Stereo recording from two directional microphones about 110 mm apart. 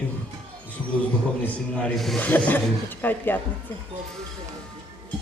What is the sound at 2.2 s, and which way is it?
A man's voice, 15° left (ahead or behind).